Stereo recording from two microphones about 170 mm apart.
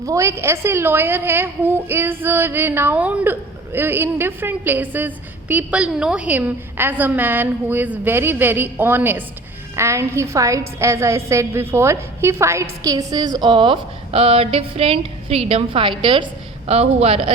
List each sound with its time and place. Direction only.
0.0 s a woman's voice: 20° right (ahead or behind); by 17.3 s 35° right (ahead or behind)